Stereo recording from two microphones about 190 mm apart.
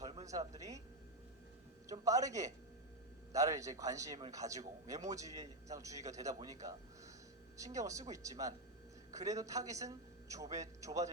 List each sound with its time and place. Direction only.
0.3 s a man's voice: 15° right (ahead or behind)
1.9 s a man's voice: 15° right (ahead or behind)